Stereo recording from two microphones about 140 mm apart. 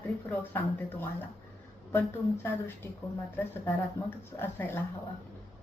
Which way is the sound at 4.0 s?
15° left (ahead or behind).